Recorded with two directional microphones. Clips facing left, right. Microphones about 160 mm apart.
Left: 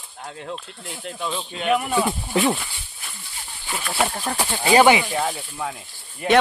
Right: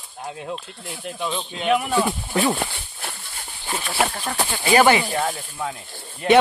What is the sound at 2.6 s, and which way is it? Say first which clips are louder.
Wild animals: right 9 dB; 65° right (ahead or behind).